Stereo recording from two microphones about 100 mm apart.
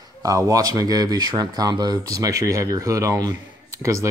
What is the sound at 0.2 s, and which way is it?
Speech, 35° right (ahead or behind).